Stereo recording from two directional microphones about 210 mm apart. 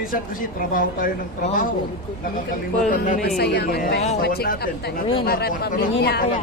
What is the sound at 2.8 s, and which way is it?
Speech, 40° left (ahead or behind).